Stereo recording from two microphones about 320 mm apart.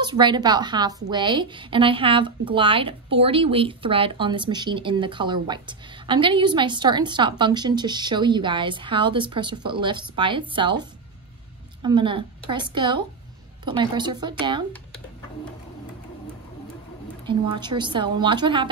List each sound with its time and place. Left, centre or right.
0.0 s a woman's voice: centre
17.3 s a woman's voice: centre